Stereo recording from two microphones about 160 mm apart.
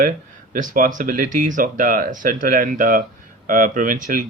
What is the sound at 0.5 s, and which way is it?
Speech, 55° right (ahead or behind).